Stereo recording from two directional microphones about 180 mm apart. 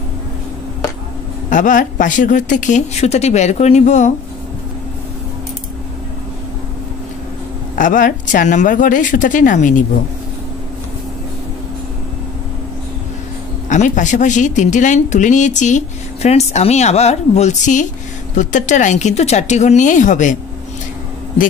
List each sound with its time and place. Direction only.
1.5 s speech: 45° left (ahead or behind)
7.7 s speech: 45° left (ahead or behind)
13.7 s speech: 45° left (ahead or behind)